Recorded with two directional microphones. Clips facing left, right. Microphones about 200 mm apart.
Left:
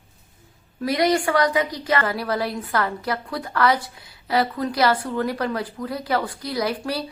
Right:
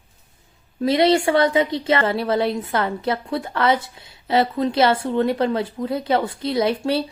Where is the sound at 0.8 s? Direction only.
25° right (ahead or behind).